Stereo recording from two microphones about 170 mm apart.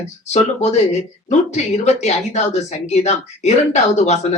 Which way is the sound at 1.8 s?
40° left (ahead or behind).